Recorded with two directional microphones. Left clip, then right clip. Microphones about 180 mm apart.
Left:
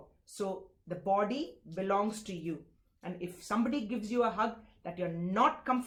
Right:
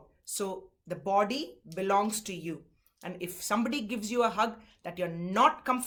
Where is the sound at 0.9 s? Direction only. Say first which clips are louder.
Right 3 dB; 20° right (ahead or behind).